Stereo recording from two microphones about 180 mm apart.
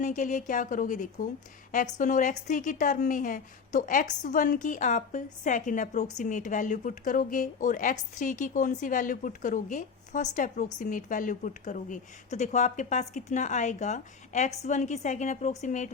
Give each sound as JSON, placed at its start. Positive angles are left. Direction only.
{"t": 0.0, "sound": "a woman's voice", "side_deg": 45}